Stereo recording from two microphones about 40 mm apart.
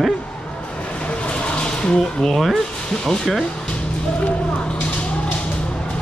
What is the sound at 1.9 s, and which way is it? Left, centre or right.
Speech, centre.